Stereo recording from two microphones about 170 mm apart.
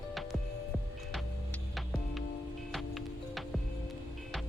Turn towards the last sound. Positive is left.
turn(degrees=0)  # may be behind; listen again after turning